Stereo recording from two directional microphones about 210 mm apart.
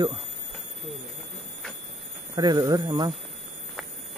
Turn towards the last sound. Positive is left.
turn(degrees=-20)  # may be behind; listen again after turning